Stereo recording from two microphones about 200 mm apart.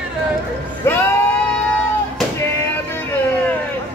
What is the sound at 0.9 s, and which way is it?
Music, 10° left (ahead or behind).